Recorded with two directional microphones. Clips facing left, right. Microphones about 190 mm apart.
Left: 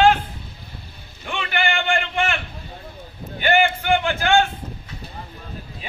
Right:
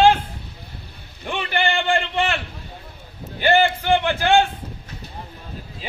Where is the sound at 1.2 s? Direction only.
35° right (ahead or behind).